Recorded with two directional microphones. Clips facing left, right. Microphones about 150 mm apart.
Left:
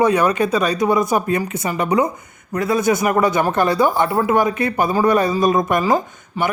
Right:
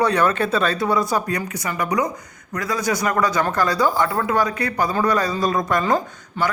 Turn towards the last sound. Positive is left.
turn(degrees=5)  # may be behind; listen again after turning